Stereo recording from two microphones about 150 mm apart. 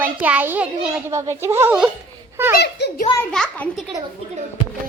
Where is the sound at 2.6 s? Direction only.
90° left.